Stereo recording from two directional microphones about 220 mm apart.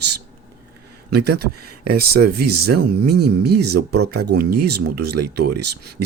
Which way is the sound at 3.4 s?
90° right.